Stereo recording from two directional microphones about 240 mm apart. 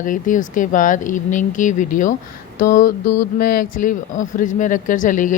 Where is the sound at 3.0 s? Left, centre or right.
Left.